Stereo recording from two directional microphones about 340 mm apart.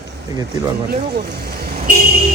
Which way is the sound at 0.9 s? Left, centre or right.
Right.